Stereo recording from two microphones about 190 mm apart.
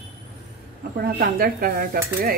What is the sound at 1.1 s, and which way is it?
A woman's voice, 50° right (ahead or behind).